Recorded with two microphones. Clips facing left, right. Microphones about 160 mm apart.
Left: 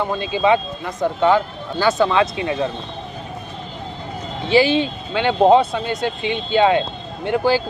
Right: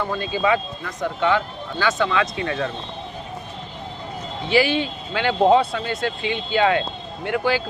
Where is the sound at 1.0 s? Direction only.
35° left (ahead or behind); by 2.6 s 20° left (ahead or behind).